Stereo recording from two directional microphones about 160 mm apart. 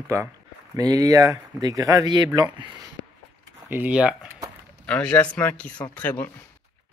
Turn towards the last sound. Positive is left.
turn(degrees=10)  # may be behind; listen again after turning